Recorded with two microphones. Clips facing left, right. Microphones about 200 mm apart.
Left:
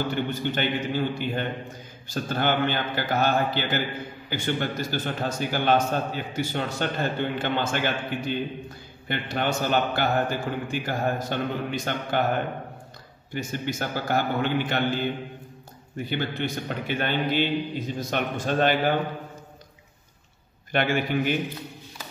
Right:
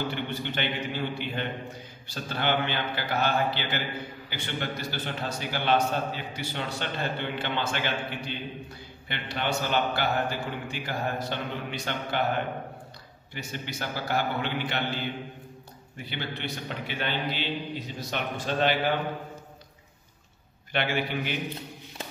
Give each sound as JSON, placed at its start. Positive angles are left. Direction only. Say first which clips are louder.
{"t": 0.1, "sound": "a man's voice", "louder": "left 5 dB", "side_deg": 45}
{"t": 13.3, "sound": "a man's voice", "louder": "left 7 dB", "side_deg": 45}
{"t": 16.0, "sound": "a man's voice", "louder": "left 7 dB", "side_deg": 45}
{"t": 20.7, "sound": "a man's voice", "louder": "left 5 dB", "side_deg": 45}